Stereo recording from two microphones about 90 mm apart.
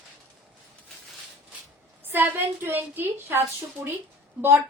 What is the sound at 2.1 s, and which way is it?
A woman's voice, 20° right (ahead or behind).